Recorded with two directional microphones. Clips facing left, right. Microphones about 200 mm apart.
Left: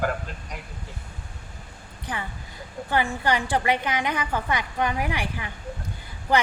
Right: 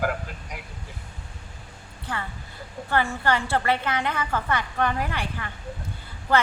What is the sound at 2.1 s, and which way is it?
A woman's voice, 15° left (ahead or behind).